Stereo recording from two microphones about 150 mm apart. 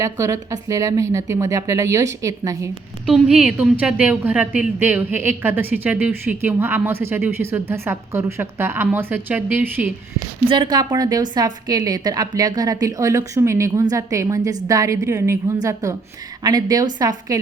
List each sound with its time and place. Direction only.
0.0 s a woman's voice: 20° right (ahead or behind)
3.1 s a woman's voice: 5° right (ahead or behind)
10.4 s a woman's voice: 35° right (ahead or behind)